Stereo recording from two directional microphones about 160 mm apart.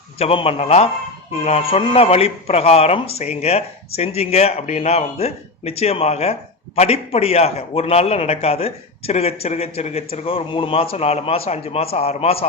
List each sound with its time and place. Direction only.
0.2 s a man's voice: 35° left (ahead or behind)